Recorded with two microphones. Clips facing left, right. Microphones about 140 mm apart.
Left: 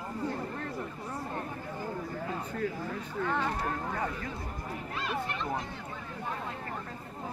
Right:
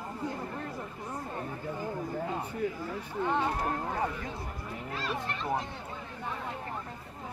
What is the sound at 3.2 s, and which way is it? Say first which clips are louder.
Speech: right 2 dB; 20° right (ahead or behind).